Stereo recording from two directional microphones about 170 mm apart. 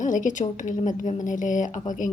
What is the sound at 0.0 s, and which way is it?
A woman's voice, 50° left (ahead or behind).